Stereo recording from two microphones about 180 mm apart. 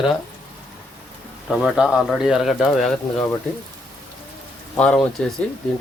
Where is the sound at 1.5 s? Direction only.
Centre (ahead or behind).